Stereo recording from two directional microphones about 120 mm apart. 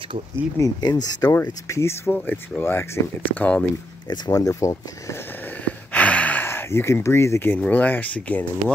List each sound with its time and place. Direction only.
0.6 s speech: 35° left (ahead or behind)
1.3 s speech: 20° left (ahead or behind)
2.1 s speech: 10° left (ahead or behind)
2.6 s speech: 20° left (ahead or behind)
4.1 s speech: 30° left (ahead or behind)
5.9 s speech: 10° left (ahead or behind)